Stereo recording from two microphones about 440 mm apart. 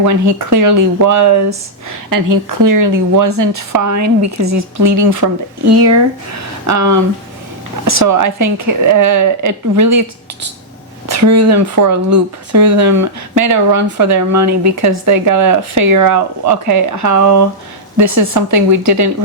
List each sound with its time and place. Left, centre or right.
0.0 s speech: right
6.7 s speech: right
11.1 s speech: right